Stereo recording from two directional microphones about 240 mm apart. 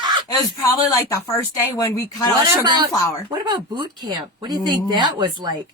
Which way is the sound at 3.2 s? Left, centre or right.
Centre.